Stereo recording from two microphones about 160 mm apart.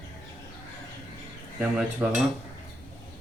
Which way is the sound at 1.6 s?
5° right (ahead or behind).